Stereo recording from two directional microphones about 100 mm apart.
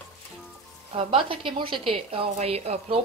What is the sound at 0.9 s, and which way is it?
A woman's voice, 65° right (ahead or behind).